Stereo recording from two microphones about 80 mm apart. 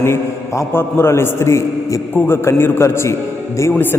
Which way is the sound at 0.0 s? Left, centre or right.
Left.